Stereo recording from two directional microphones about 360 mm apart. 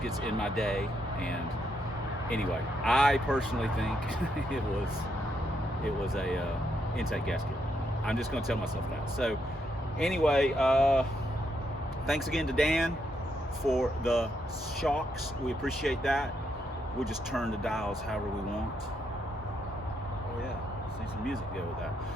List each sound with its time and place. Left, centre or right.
0.0 s speech: centre
2.8 s speech: centre
6.1 s speech: centre
12.0 s speech: centre